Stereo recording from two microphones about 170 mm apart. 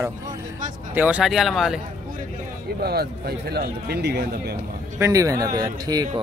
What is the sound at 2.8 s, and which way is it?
Speech, 70° right (ahead or behind).